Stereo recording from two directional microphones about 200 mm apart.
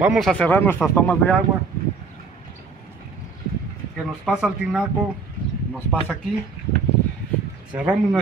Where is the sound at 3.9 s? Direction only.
5° right (ahead or behind).